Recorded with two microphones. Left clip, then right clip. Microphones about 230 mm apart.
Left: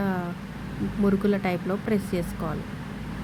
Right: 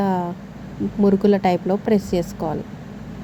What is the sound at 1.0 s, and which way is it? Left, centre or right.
Speech, centre.